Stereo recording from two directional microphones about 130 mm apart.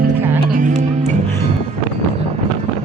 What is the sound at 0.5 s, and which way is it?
Music, 80° right.